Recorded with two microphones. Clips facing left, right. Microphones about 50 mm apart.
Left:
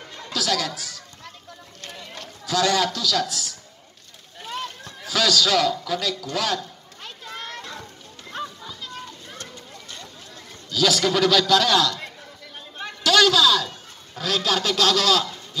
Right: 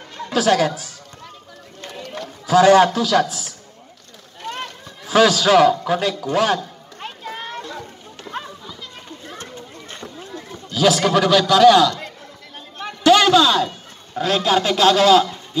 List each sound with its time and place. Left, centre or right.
0.3 s speech: right
0.7 s speech: left
2.1 s a man's voice: right
5.0 s a sound: right
8.3 s children playing: right
8.6 s children playing: centre
9.4 s a sound: right
10.3 s a man's voice: centre